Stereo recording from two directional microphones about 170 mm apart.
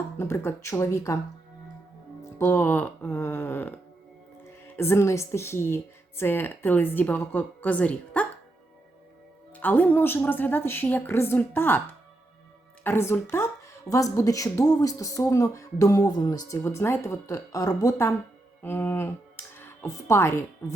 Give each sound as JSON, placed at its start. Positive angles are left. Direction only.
{"t": 0.2, "sound": "a woman's voice", "side_deg": 15}
{"t": 2.4, "sound": "a woman's voice", "side_deg": 10}
{"t": 9.6, "sound": "a woman's voice", "side_deg": 10}